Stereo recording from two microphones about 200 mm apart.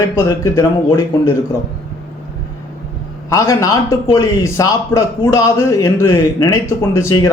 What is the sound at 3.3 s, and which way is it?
A man's voice, 15° left (ahead or behind).